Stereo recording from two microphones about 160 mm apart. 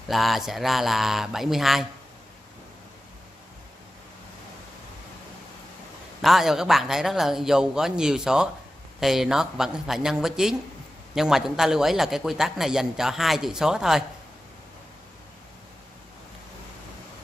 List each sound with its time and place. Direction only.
0.1 s a man's voice: centre (ahead or behind)
6.2 s a man's voice: centre (ahead or behind)